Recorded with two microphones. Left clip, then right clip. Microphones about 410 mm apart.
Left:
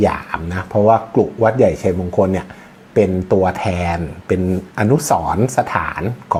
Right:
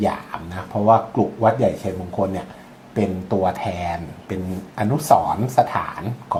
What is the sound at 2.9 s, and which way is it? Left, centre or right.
Speech, left.